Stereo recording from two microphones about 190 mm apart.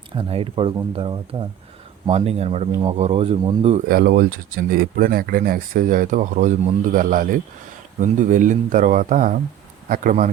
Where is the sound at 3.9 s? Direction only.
50° right (ahead or behind).